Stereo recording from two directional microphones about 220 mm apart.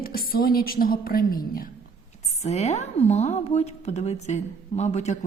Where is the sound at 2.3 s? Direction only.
30° left (ahead or behind).